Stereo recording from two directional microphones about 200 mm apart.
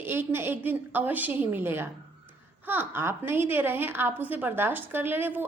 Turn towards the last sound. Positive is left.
turn(degrees=-10)  # may be behind; listen again after turning